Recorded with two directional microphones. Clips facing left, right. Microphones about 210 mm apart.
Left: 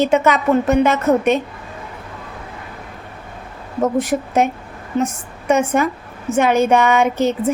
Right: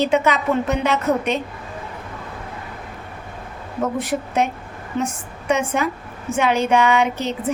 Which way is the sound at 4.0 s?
45° left (ahead or behind).